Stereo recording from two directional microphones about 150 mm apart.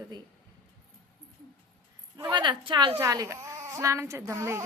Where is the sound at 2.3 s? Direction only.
30° right (ahead or behind).